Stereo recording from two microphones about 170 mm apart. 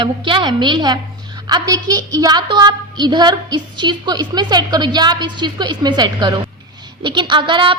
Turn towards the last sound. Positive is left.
turn(degrees=-30)  # may be behind; listen again after turning